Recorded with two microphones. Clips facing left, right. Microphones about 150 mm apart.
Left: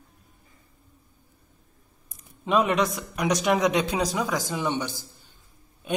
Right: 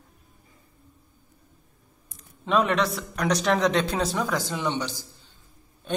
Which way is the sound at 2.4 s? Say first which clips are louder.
Even; 5° left (ahead or behind).